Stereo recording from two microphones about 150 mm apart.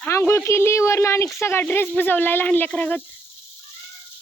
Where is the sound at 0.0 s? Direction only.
15° left (ahead or behind).